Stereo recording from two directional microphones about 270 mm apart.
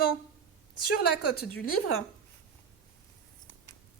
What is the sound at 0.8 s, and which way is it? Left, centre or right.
Speech, left.